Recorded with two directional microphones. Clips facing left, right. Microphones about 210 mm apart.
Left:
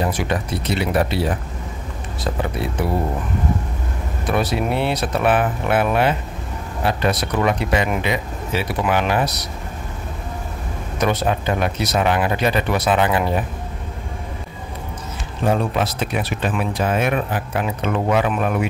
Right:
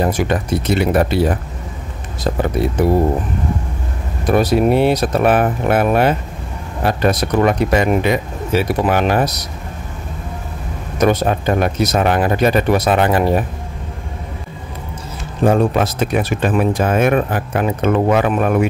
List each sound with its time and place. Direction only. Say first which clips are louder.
0.0 s speech: right 5 dB; 45° right (ahead or behind)
4.3 s speech: right 7 dB; 40° right (ahead or behind)
11.0 s speech: right 5 dB; 45° right (ahead or behind)
15.4 s speech: right 6 dB; 45° right (ahead or behind)